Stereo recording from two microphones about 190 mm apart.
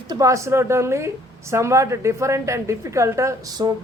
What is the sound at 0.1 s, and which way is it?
A woman's voice, 15° right (ahead or behind).